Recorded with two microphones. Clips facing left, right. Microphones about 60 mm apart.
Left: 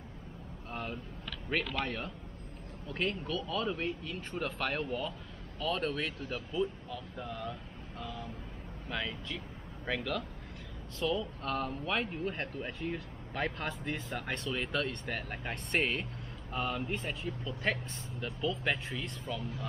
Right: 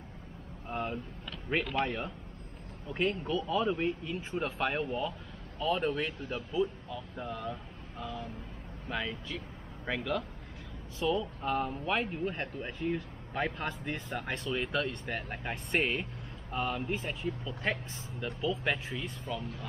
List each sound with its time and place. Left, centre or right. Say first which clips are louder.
0.7 s speech: right 5 dB; centre
8.0 s speech: right 3 dB; centre